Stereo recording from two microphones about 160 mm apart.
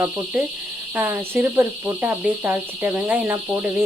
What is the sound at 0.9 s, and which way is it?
Speech, 10° right (ahead or behind).